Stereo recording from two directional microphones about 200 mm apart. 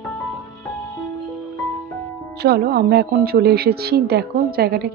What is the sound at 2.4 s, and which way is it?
Speech, 55° right (ahead or behind).